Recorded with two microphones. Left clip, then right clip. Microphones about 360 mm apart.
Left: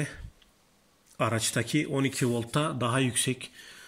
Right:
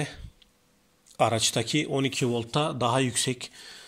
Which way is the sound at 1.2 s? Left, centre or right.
Centre.